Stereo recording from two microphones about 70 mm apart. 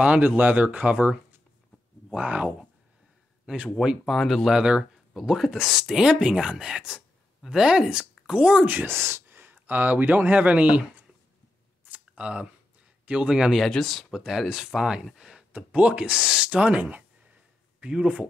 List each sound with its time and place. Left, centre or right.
0.0 s speech: centre
4.1 s speech: centre
4.5 s speech: centre
8.7 s speech: right; by 11.1 s centre
11.8 s a sound: centre
13.0 s speech: centre
15.5 s speech: centre